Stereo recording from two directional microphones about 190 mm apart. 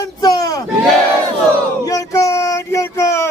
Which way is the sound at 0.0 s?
20° left (ahead or behind).